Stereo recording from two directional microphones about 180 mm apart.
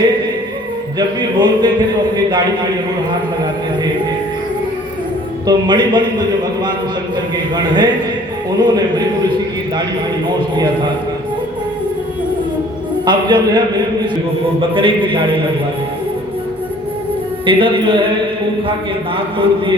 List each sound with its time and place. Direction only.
0.9 s a man's voice: 25° right (ahead or behind)
5.5 s a man's voice: 25° right (ahead or behind)
13.1 s a man's voice: 25° right (ahead or behind)
17.4 s a man's voice: 30° right (ahead or behind)
19.1 s a man's voice: 30° right (ahead or behind)